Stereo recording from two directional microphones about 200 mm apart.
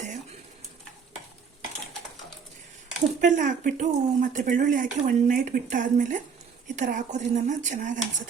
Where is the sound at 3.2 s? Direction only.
40° right (ahead or behind).